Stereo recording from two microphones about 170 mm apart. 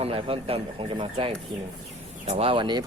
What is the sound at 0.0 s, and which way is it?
Speech, 35° right (ahead or behind).